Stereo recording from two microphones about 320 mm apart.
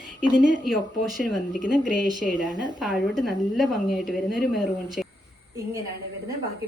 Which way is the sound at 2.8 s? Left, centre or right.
Centre.